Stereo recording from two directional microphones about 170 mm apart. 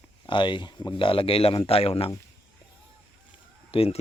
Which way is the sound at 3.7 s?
35° left (ahead or behind).